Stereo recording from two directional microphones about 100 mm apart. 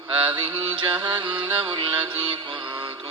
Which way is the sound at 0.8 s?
50° right (ahead or behind).